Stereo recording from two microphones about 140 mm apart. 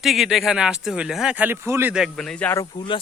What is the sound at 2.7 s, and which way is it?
Speech, 35° left (ahead or behind).